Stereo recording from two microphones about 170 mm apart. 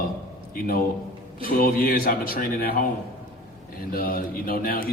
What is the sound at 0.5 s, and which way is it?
A man's voice, 60° left (ahead or behind).